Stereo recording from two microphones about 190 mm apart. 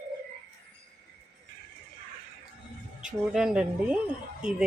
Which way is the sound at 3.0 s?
5° right (ahead or behind).